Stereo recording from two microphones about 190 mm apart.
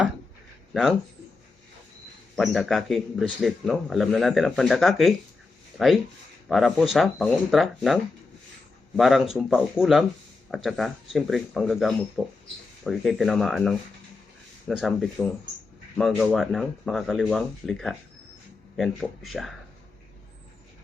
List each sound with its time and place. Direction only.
0.7 s speech: 5° right (ahead or behind)
2.3 s speech: centre (ahead or behind)
9.0 s speech: centre (ahead or behind)